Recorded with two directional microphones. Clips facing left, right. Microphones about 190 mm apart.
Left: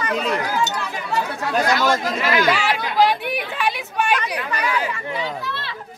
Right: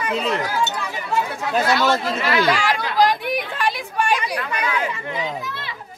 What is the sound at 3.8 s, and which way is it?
Chatter, 10° right (ahead or behind).